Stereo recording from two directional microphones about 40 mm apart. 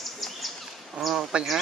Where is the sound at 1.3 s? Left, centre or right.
Right.